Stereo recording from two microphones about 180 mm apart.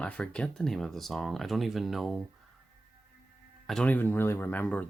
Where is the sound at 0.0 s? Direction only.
5° left (ahead or behind).